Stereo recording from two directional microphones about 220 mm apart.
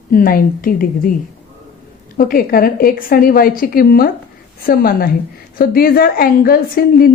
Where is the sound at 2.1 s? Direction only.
40° left (ahead or behind).